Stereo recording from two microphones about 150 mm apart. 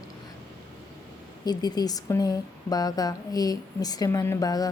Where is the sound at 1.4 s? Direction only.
25° left (ahead or behind).